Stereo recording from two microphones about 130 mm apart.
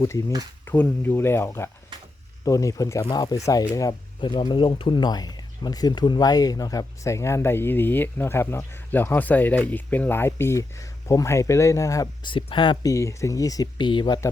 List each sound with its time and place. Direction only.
0.0 s speech: 20° left (ahead or behind)
12.2 s speech: 40° left (ahead or behind)
12.8 s speech: 25° left (ahead or behind)